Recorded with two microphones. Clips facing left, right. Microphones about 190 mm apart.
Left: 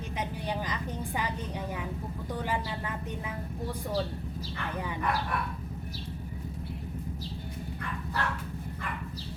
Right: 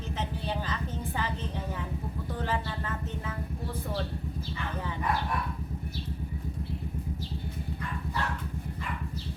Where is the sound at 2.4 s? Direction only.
15° left (ahead or behind).